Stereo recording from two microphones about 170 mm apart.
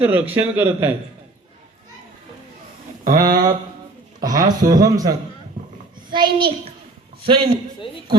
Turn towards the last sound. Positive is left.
turn(degrees=-35)  # may be behind; listen again after turning